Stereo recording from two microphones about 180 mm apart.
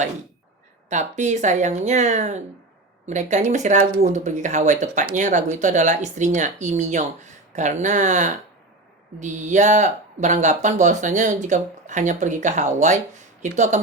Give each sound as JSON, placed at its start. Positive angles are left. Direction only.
{"t": 0.9, "sound": "speech", "side_deg": -40}